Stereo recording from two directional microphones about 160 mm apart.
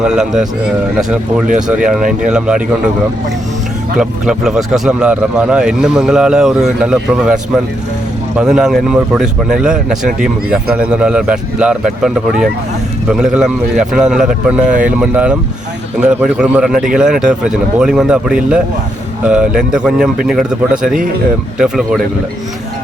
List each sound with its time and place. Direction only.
0.0 s speech: 5° right (ahead or behind)
3.9 s speech: 5° right (ahead or behind)